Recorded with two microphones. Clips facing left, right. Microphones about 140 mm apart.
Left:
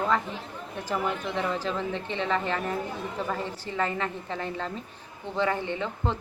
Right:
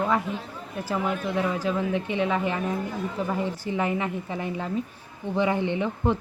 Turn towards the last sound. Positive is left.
turn(degrees=-15)  # may be behind; listen again after turning